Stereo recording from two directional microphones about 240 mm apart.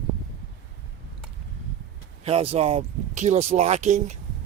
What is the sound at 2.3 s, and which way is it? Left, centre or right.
Speech, right.